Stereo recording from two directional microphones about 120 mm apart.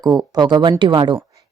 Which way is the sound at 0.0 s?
35° right (ahead or behind).